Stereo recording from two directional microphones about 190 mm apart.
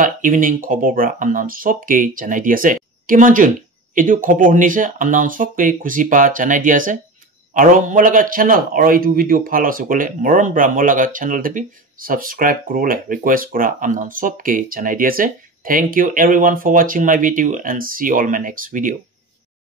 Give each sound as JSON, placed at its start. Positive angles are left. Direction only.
{"t": 0.0, "sound": "a man's voice", "side_deg": -45}